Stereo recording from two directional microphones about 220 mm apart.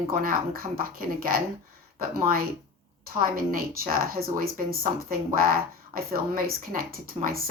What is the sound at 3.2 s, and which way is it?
Speech, 40° right (ahead or behind).